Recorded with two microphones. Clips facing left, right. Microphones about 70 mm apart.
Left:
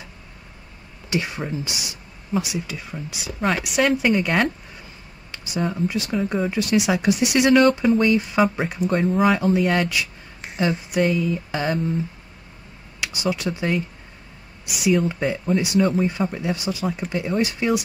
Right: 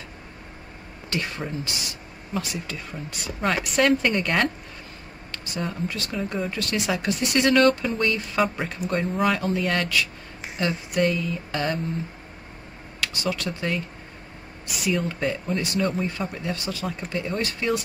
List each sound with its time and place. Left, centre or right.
1.1 s speech: centre
5.7 s speech: centre
8.8 s a sound: centre
9.4 s speech: centre
10.4 s a sound: centre
13.0 s speech: centre
15.0 s speech: centre